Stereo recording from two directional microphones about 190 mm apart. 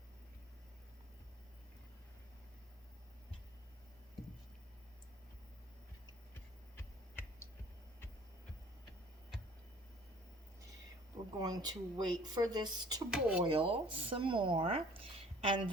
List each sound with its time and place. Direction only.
11.3 s speech: 20° right (ahead or behind)
13.1 s speech: 5° right (ahead or behind)
13.4 s speech: 25° right (ahead or behind)